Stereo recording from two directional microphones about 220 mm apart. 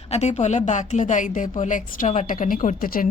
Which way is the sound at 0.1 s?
30° left (ahead or behind).